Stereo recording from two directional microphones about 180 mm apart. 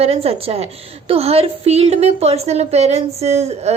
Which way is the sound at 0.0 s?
35° right (ahead or behind).